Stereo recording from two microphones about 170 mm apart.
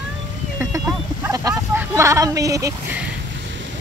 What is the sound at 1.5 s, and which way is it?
Speech, 15° right (ahead or behind).